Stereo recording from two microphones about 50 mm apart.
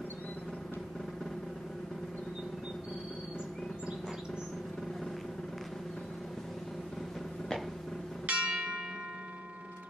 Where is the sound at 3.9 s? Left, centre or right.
Centre.